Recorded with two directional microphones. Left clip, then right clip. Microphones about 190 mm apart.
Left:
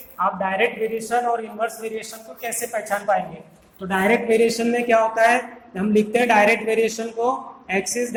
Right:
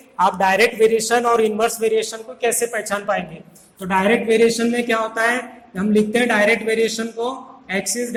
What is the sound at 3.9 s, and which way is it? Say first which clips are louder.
Speech: right 2 dB; 35° right (ahead or behind).